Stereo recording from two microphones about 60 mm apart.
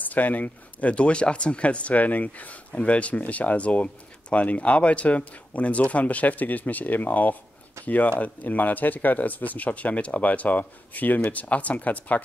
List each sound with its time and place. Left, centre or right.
0.0 s speech: left